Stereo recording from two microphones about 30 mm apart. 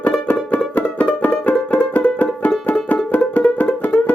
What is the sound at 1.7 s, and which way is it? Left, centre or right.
Music, left.